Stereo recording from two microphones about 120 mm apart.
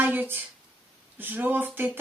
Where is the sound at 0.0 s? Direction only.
15° right (ahead or behind).